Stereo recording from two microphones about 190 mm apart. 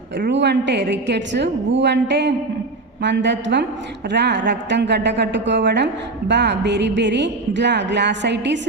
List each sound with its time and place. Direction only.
0.3 s a woman's voice: 65° right (ahead or behind)